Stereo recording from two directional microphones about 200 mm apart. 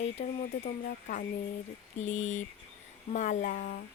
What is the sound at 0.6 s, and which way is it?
Speech, 40° left (ahead or behind).